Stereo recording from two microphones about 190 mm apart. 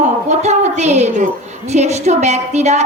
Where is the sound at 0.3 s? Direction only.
35° right (ahead or behind).